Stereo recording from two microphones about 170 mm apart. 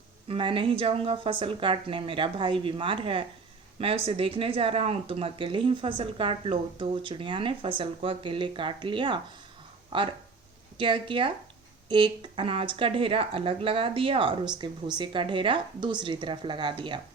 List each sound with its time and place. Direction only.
0.3 s a woman's voice: 30° right (ahead or behind)